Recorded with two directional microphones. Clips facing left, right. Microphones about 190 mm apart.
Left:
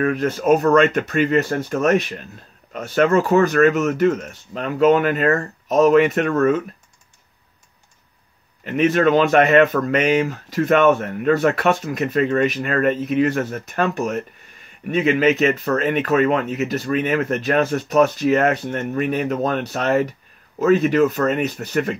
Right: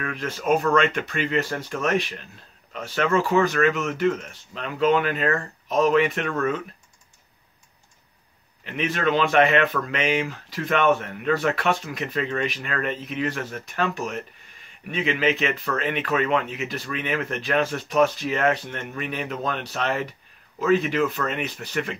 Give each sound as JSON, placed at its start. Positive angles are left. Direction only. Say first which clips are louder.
{"t": 0.0, "sound": "speech", "louder": "left 9 dB", "side_deg": 45}
{"t": 8.6, "sound": "speech", "louder": "left 8 dB", "side_deg": 45}